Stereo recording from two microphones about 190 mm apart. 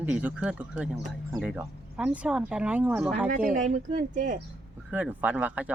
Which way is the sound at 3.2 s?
45° right (ahead or behind).